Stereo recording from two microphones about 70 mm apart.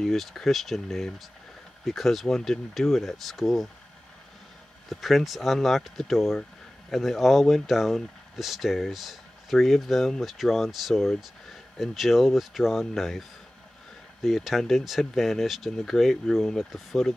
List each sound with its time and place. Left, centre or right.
0.0 s speech: centre
4.8 s speech: centre
14.2 s speech: centre